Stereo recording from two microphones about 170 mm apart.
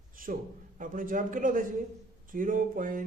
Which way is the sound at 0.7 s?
50° right (ahead or behind).